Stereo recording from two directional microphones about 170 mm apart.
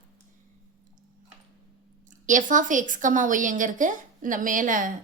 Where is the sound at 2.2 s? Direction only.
50° right (ahead or behind).